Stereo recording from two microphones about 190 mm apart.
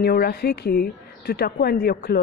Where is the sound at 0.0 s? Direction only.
55° left (ahead or behind).